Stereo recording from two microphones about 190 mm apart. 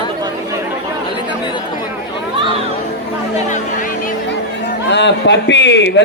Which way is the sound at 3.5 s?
45° left (ahead or behind).